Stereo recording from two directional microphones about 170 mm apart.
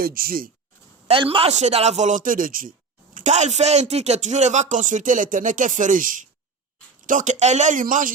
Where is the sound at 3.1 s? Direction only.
45° right (ahead or behind).